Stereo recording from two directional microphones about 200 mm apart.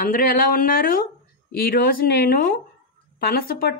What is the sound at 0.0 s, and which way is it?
A woman's voice, 45° left (ahead or behind).